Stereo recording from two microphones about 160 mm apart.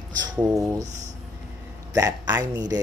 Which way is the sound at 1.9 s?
20° right (ahead or behind).